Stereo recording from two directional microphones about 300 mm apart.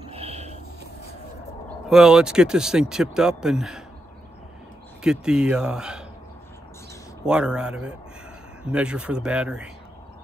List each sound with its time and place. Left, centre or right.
0.1 s a sound: centre
1.9 s speech: centre
5.0 s speech: centre
7.2 s speech: centre